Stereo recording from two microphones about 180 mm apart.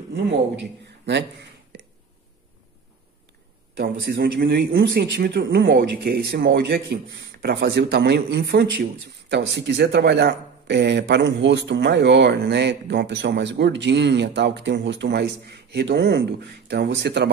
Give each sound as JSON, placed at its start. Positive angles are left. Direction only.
{"t": 0.1, "sound": "a man's voice", "side_deg": -80}
{"t": 1.7, "sound": "a sound", "side_deg": -75}
{"t": 3.7, "sound": "speech", "side_deg": -75}